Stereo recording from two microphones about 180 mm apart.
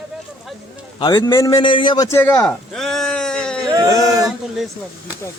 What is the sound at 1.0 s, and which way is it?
Speech, 25° left (ahead or behind).